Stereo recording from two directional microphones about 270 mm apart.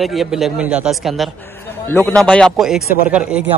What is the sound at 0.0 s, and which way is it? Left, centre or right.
A man's voice, centre.